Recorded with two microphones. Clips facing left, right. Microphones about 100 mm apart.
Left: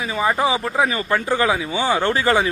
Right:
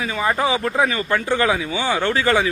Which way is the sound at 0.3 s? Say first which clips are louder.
Even; 25° left (ahead or behind).